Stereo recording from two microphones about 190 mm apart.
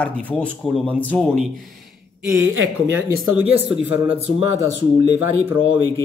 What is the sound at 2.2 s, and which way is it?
A man's voice, 5° right (ahead or behind).